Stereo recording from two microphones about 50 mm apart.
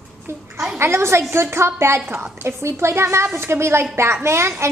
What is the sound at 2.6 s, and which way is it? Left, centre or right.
A woman's voice, right.